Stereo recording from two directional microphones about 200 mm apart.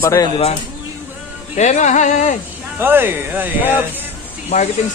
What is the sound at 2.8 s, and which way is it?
Speech, 10° right (ahead or behind).